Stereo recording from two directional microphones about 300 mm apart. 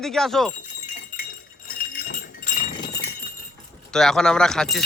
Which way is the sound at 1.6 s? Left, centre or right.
Left.